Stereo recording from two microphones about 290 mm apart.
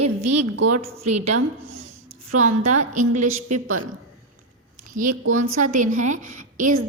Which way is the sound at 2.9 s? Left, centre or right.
Right.